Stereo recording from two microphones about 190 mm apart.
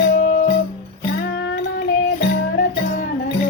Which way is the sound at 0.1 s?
45° left (ahead or behind).